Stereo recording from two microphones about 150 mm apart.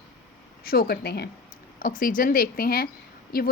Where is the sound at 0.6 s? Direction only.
90° left.